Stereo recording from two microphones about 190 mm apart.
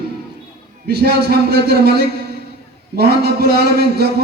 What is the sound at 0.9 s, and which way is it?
A man's voice, 55° right (ahead or behind).